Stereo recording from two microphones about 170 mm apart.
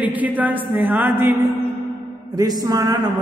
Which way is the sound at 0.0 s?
10° right (ahead or behind).